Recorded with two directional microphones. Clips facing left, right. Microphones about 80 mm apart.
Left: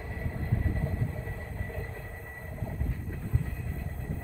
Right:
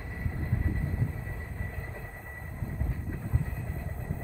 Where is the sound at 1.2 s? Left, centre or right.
Centre.